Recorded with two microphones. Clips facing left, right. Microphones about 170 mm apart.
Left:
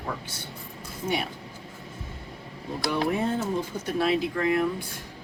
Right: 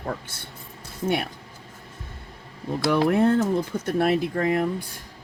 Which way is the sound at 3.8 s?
50° right (ahead or behind).